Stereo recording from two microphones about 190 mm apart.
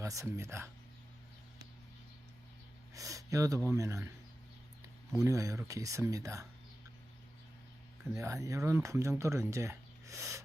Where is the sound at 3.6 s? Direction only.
15° right (ahead or behind).